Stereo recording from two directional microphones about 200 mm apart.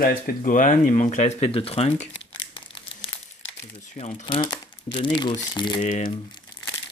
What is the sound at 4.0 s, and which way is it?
Speech, 30° left (ahead or behind).